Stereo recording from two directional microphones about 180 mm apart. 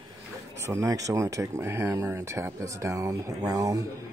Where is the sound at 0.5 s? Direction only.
15° right (ahead or behind).